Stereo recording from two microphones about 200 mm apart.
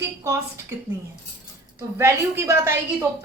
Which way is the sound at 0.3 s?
15° right (ahead or behind).